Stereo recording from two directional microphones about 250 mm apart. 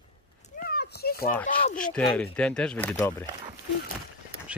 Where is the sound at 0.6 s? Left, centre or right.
Left.